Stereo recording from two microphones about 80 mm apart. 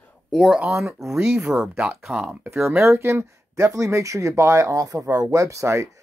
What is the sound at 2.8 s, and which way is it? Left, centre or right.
Speech, right.